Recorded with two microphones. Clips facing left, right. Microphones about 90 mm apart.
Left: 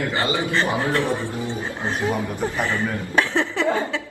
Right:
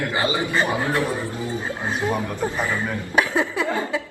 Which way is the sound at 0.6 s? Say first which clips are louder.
Even; 20° left (ahead or behind).